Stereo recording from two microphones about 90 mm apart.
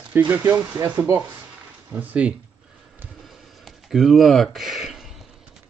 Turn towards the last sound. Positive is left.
turn(degrees=-5)  # may be behind; listen again after turning